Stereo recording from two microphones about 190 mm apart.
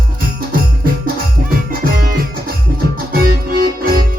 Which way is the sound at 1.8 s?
50° right (ahead or behind).